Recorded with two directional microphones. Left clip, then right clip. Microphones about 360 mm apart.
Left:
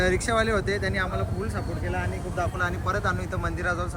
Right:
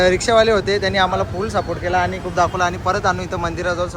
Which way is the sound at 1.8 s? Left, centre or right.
Right.